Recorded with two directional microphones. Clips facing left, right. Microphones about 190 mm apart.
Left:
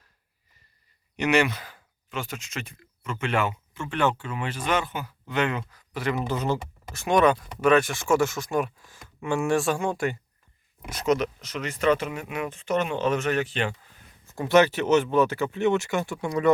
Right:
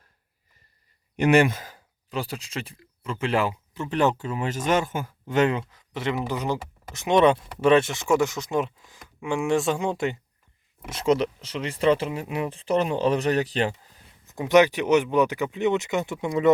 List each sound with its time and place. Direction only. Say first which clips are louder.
1.1 s speech: right 4 dB; 50° right (ahead or behind)
5.5 s speech: right 1 dB; 25° right (ahead or behind)
14.3 s speech: right 2 dB; 15° right (ahead or behind)